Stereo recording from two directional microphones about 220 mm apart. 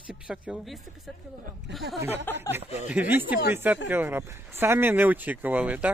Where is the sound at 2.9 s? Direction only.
10° right (ahead or behind).